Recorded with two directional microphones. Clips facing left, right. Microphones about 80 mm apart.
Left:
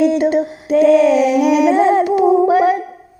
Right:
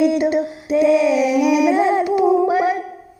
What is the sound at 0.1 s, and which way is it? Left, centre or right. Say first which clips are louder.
Female singing: left 3 dB; left.